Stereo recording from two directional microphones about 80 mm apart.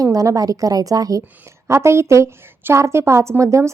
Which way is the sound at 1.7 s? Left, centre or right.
Right.